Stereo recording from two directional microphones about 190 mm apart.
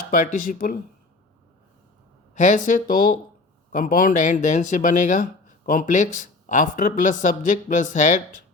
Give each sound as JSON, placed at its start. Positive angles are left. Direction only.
{"t": 0.1, "sound": "speech", "side_deg": 45}
{"t": 2.3, "sound": "speech", "side_deg": 40}